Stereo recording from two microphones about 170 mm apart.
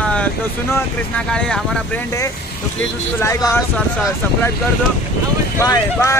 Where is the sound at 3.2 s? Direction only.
15° left (ahead or behind).